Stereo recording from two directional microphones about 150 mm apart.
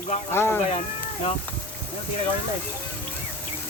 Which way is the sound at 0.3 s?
15° left (ahead or behind).